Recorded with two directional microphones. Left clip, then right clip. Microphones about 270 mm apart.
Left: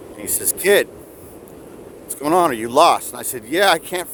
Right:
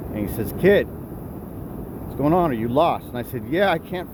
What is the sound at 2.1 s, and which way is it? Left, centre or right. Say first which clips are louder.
Speech: left 3 dB; left.